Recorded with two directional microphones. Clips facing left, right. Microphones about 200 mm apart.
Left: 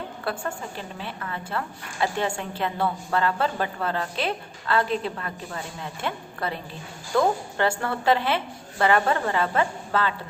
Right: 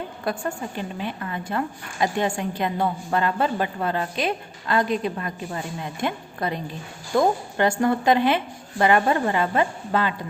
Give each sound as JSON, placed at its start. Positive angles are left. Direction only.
{"t": 0.3, "sound": "a woman's voice", "side_deg": -15}